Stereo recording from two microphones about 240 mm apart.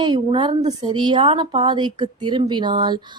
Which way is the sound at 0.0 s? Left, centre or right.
Centre.